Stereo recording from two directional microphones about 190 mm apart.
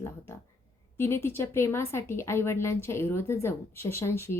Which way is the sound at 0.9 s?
10° left (ahead or behind).